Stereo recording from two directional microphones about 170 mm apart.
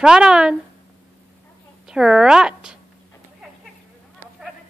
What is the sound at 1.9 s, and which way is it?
Speech, 5° right (ahead or behind).